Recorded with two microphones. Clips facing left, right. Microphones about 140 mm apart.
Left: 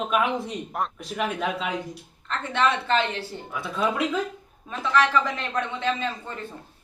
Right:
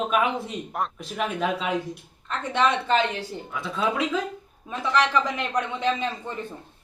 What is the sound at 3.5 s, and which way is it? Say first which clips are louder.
Speech: even; centre (ahead or behind).